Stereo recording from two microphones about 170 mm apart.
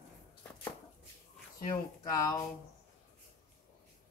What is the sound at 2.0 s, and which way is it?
Speech, 20° left (ahead or behind).